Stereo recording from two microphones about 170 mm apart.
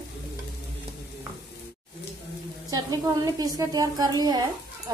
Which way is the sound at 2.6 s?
20° right (ahead or behind).